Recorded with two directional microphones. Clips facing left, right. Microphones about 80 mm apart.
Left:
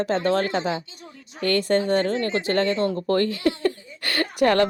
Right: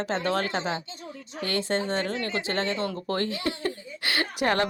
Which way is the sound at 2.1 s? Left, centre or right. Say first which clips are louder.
Left 6 dB; left.